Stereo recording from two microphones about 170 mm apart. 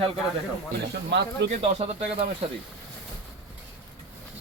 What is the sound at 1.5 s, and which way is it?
Speech, 35° right (ahead or behind).